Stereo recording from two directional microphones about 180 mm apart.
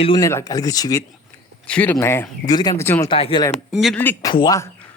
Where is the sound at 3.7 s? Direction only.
Centre (ahead or behind).